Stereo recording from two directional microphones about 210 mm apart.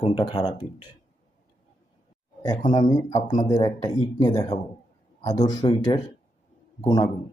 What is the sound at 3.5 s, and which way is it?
Speech, 20° left (ahead or behind).